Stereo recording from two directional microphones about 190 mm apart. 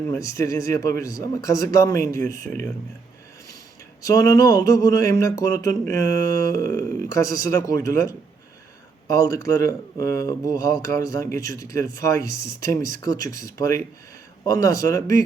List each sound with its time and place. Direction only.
0.1 s speech: 15° left (ahead or behind)
4.0 s speech: 20° left (ahead or behind)